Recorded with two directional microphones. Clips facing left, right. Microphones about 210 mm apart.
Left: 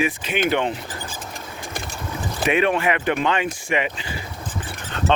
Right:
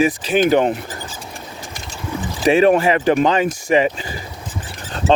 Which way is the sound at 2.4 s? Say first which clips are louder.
Right 7 dB; 35° right (ahead or behind).